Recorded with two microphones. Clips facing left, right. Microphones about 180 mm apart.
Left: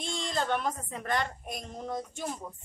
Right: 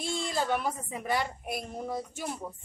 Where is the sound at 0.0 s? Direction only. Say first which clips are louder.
Right 1 dB; 5° right (ahead or behind).